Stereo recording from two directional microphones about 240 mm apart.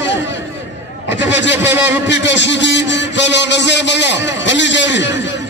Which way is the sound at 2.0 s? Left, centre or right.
Left.